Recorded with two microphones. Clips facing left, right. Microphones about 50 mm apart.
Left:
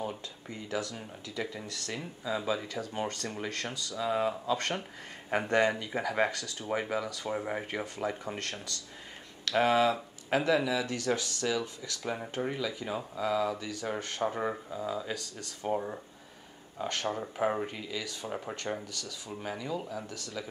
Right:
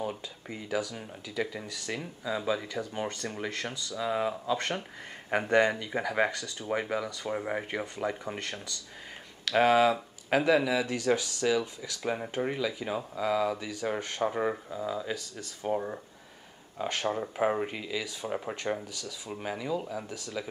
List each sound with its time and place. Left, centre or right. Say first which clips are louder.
0.0 s speech: right 2 dB; centre
9.4 s speech: right 3 dB; centre
16.8 s speech: right 3 dB; centre